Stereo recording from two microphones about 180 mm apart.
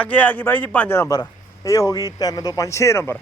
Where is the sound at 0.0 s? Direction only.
10° left (ahead or behind).